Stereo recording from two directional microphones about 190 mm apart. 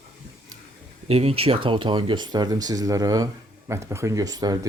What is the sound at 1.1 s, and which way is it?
Speech, 30° right (ahead or behind).